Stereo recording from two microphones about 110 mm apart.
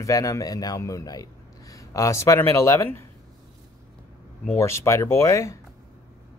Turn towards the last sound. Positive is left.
turn(degrees=25)  # may be behind; listen again after turning